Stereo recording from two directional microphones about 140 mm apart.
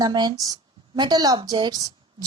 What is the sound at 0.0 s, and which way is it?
A woman's voice, 30° right (ahead or behind).